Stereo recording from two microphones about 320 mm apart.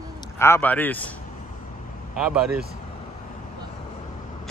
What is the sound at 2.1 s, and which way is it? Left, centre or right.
Speech, centre.